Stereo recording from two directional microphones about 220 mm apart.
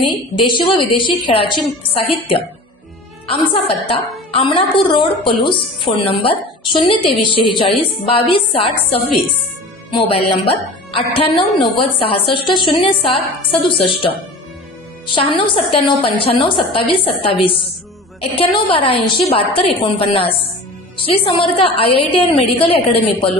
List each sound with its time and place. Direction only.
0.0 s speech: 20° left (ahead or behind)
15.1 s speech: 25° left (ahead or behind)